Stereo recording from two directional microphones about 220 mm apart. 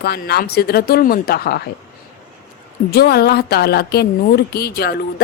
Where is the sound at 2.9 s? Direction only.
45° left (ahead or behind).